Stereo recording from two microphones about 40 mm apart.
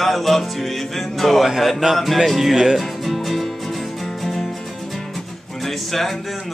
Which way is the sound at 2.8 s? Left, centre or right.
Centre.